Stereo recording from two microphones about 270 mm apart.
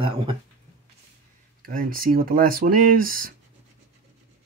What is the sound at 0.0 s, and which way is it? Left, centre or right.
Speech, centre.